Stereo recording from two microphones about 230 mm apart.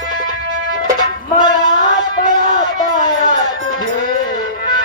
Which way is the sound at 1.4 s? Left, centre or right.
Centre.